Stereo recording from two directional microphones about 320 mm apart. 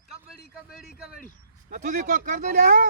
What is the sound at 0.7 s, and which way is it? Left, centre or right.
Speech, centre.